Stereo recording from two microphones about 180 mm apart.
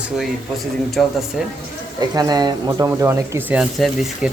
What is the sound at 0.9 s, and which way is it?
Speech, centre (ahead or behind).